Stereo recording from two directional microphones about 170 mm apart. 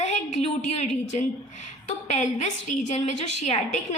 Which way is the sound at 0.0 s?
45° left (ahead or behind).